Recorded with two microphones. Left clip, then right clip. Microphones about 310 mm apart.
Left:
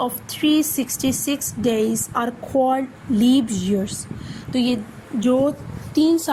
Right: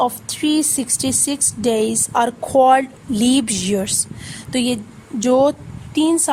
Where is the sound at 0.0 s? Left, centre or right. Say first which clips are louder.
Right 3 dB; right.